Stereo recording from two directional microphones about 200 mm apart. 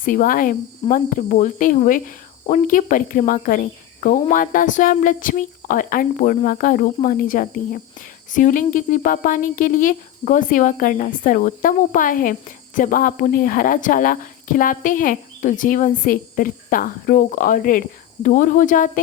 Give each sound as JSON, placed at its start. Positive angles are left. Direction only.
{"t": 0.0, "sound": "speech", "side_deg": 40}